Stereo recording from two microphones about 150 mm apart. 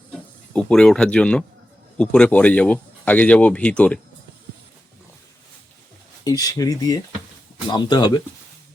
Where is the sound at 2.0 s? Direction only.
5° left (ahead or behind).